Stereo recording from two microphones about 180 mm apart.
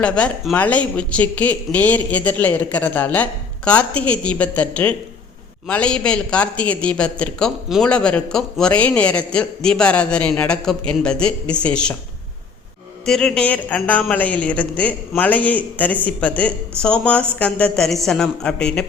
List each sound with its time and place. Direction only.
0.0 s a man's voice: 5° left (ahead or behind)
13.1 s speech: 5° left (ahead or behind)